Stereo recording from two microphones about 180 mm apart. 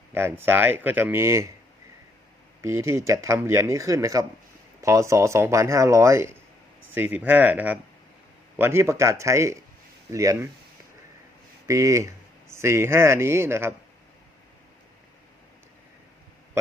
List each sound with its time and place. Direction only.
0.1 s speech: 15° right (ahead or behind)
2.6 s speech: 15° right (ahead or behind)
11.7 s speech: 15° right (ahead or behind)